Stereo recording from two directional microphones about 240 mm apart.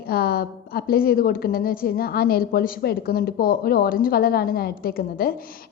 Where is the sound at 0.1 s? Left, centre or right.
Left.